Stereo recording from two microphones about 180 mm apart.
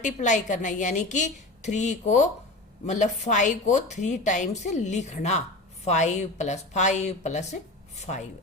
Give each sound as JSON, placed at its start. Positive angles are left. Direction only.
{"t": 0.0, "sound": "speech", "side_deg": 40}